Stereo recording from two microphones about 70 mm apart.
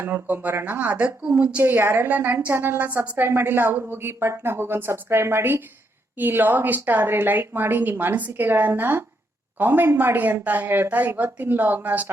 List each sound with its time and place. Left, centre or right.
0.0 s a woman's voice: right